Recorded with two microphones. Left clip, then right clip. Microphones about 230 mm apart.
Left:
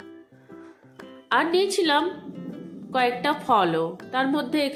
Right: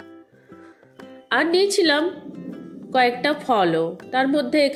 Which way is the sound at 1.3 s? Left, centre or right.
Centre.